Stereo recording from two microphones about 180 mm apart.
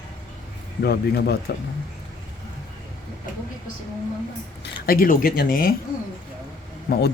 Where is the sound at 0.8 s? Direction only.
60° left (ahead or behind).